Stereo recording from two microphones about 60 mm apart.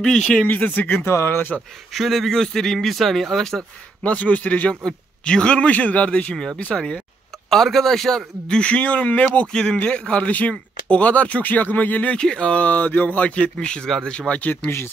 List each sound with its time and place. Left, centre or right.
0.1 s a man's voice: centre
0.7 s speech: left
1.9 s speech: centre
4.0 s speech: left
6.3 s a man's voice: centre
7.4 s a man's voice: centre; by 9.5 s left
9.5 s a man's voice: centre